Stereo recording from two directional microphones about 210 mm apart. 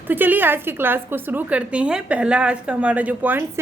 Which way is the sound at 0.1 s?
10° right (ahead or behind).